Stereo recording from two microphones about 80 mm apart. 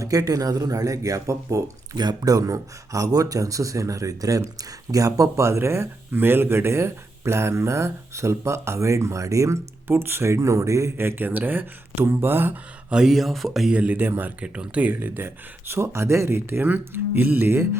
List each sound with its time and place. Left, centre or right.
0.0 s speech: right
2.0 s speech: right
9.8 s speech: right
12.9 s speech: centre
13.7 s speech: right
14.4 s speech: centre; by 17.7 s right